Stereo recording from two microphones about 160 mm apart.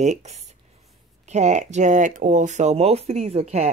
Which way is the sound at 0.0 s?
45° right (ahead or behind).